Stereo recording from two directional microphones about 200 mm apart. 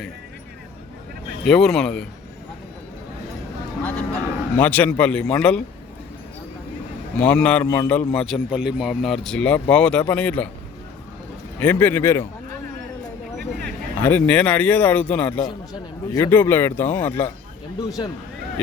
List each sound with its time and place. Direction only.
1.5 s speech: 5° left (ahead or behind)
3.8 s speech: 5° left (ahead or behind)
7.2 s speech: 5° left (ahead or behind)
11.6 s speech: 10° left (ahead or behind)
14.0 s speech: 10° left (ahead or behind)
15.4 s speech: 15° left (ahead or behind)